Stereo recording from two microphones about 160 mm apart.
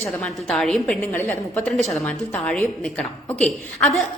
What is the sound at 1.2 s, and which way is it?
Speech, 15° left (ahead or behind).